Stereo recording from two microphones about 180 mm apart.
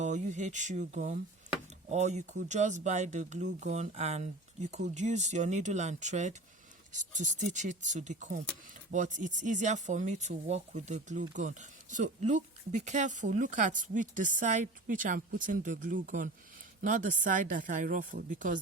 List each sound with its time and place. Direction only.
0.0 s speech: 40° right (ahead or behind)